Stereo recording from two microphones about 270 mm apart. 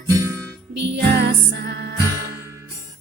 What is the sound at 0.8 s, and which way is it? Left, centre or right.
Music, right.